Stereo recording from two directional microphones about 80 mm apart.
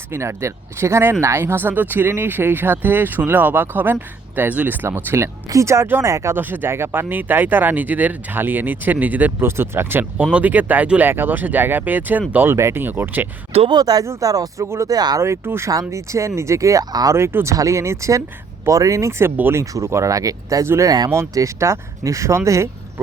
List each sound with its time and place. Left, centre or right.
0.1 s speech: right
5.5 s speech: right
6.3 s speech: right
13.7 s speech: right
14.0 s speech: right
15.2 s speech: right
16.9 s speech: right
17.2 s speech: right
19.4 s speech: right
19.7 s speech: right